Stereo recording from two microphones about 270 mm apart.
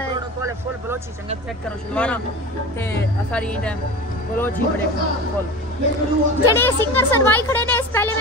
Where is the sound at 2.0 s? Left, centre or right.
Centre.